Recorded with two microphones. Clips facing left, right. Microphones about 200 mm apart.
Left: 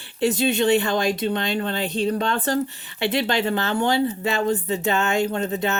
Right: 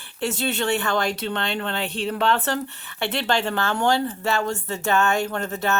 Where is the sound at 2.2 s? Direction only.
65° right (ahead or behind).